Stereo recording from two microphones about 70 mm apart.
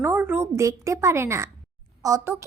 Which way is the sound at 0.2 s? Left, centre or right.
Right.